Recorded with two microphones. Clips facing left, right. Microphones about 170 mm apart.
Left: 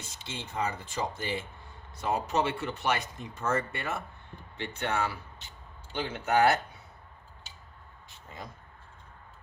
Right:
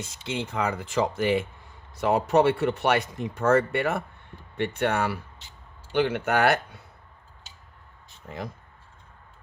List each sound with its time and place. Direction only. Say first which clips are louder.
0.3 s speech: right 6 dB; 85° right
2.0 s speech: right 8 dB; 70° right (ahead or behind)